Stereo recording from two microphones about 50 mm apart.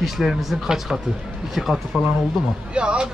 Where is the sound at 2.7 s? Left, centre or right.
Right.